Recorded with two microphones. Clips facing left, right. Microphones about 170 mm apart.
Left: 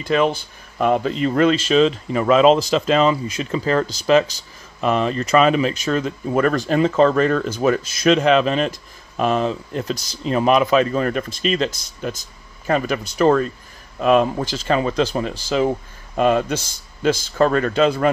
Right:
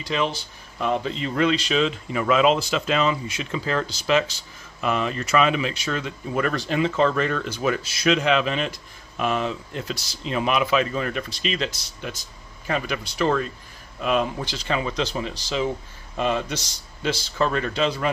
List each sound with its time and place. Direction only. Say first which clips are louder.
0.0 s speech: left 7 dB; 50° left (ahead or behind)